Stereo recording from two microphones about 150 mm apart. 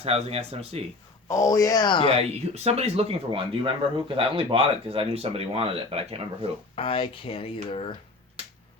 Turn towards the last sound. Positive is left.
turn(degrees=40)  # may be behind; listen again after turning